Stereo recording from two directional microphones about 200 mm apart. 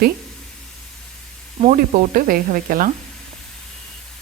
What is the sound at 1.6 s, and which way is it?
Speech, 35° right (ahead or behind).